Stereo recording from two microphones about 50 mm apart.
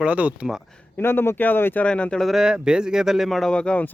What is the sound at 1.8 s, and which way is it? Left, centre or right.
Speech, left.